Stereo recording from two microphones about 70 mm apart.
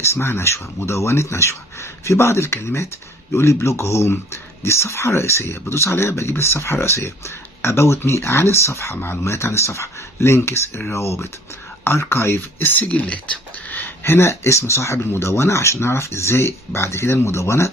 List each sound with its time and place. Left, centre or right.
0.0 s speech: left